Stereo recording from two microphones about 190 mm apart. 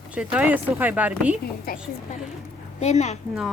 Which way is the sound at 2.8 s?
35° left (ahead or behind).